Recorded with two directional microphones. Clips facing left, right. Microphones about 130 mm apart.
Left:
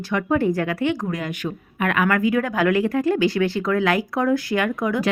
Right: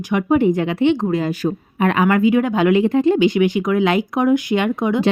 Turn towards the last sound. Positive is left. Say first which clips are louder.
# right 4 dB
turn(degrees=-20)  # may be behind; listen again after turning